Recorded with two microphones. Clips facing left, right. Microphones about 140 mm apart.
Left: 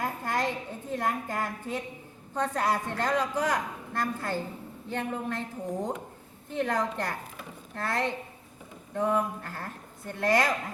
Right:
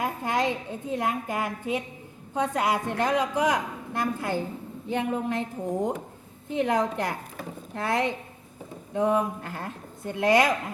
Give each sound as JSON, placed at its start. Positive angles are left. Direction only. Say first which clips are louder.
{"t": 0.0, "sound": "a woman's voice", "louder": "right 3 dB", "side_deg": -20}